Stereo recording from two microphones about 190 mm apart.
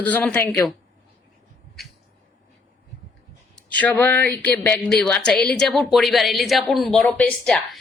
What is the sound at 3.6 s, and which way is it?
Speech, 5° left (ahead or behind).